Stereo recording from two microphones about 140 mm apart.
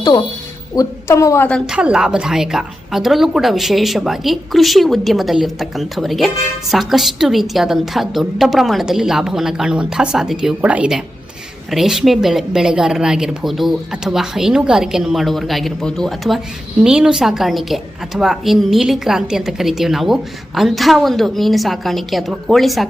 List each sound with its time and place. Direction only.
0.8 s a woman's voice: 20° left (ahead or behind)
1.5 s a woman's voice: centre (ahead or behind)